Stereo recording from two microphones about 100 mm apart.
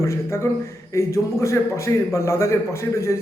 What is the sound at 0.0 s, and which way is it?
A man's voice, 30° left (ahead or behind).